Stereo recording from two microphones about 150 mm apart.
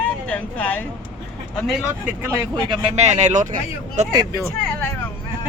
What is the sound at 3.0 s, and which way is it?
Speech, 50° right (ahead or behind).